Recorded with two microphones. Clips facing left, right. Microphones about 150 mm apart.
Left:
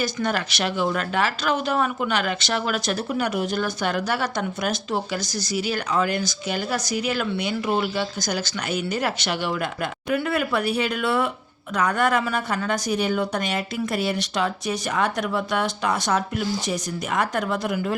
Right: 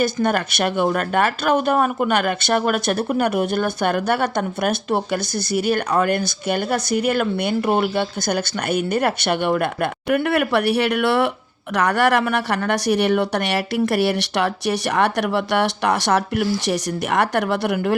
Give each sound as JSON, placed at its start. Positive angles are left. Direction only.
{"t": 0.0, "sound": "a woman's voice", "side_deg": -55}